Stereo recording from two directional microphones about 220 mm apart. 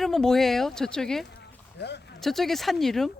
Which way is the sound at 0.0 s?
Centre (ahead or behind).